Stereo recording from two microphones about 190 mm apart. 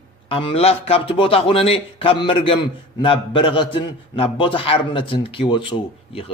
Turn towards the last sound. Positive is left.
turn(degrees=25)  # may be behind; listen again after turning